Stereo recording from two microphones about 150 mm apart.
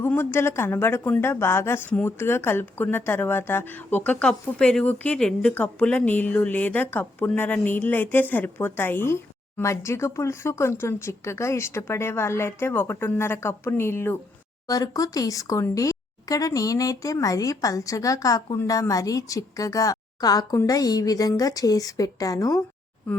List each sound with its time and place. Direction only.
0.0 s a woman's voice: 15° left (ahead or behind)